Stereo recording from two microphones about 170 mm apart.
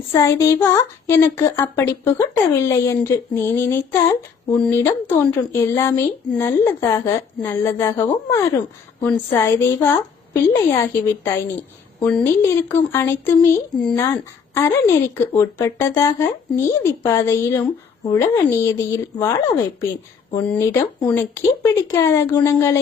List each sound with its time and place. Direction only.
0.1 s speech: 20° left (ahead or behind)
20.3 s speech: 15° left (ahead or behind)